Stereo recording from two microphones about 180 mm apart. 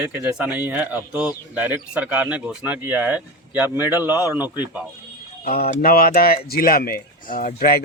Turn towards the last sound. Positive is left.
turn(degrees=55)  # may be behind; listen again after turning